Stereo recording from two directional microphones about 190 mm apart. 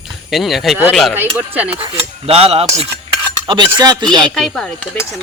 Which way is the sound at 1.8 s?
30° right (ahead or behind).